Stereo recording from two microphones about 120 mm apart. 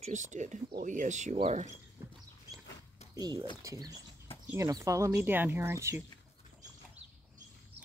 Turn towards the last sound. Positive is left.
turn(degrees=-20)  # may be behind; listen again after turning